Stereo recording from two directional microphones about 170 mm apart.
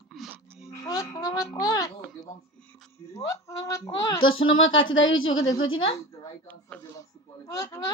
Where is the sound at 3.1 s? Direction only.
20° left (ahead or behind).